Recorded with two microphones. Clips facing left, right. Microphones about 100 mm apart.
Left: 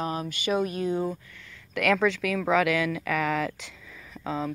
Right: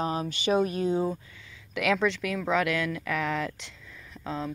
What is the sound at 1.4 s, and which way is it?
Speech, 10° right (ahead or behind).